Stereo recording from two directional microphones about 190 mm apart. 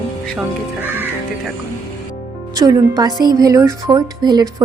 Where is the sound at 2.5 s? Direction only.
20° right (ahead or behind).